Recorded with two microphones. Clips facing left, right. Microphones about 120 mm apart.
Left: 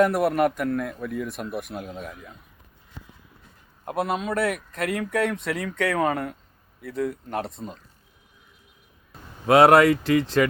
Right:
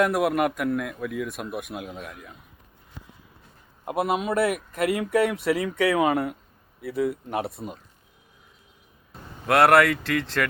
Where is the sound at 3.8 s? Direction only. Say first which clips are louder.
Right 1 dB; 5° right (ahead or behind).